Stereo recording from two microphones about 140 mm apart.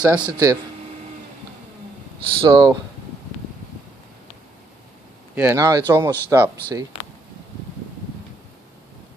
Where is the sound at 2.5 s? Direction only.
25° right (ahead or behind).